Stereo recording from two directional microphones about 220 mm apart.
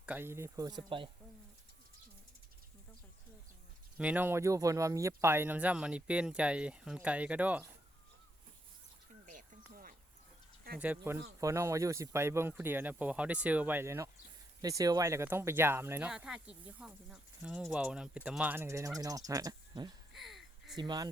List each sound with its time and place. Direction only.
0.0 s speech: 10° right (ahead or behind)
3.9 s speech: 5° right (ahead or behind)
9.2 s a sound: 35° right (ahead or behind)
10.8 s speech: 10° right (ahead or behind)
20.1 s a sound: centre (ahead or behind)
20.7 s speech: 20° right (ahead or behind)